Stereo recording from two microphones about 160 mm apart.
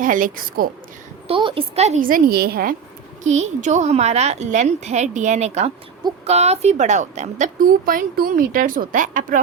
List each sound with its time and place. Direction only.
0.0 s a woman's voice: 55° right (ahead or behind)
1.3 s a woman's voice: 35° right (ahead or behind)
2.0 s a woman's voice: 60° right (ahead or behind)
3.2 s a woman's voice: 45° right (ahead or behind)